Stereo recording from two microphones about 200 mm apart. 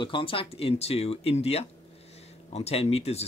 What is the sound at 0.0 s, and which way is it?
Speech, 25° left (ahead or behind).